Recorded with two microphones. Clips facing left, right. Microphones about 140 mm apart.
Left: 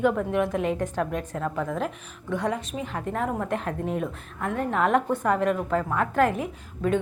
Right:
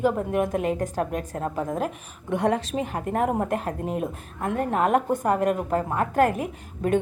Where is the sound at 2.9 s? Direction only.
50° right (ahead or behind).